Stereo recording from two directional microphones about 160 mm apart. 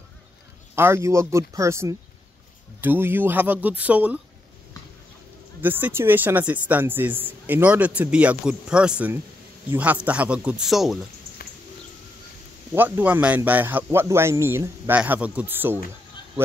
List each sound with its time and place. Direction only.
0.7 s speech: 15° right (ahead or behind)
5.6 s speech: 10° right (ahead or behind)
11.4 s bird: 65° left (ahead or behind)
12.7 s speech: 10° right (ahead or behind)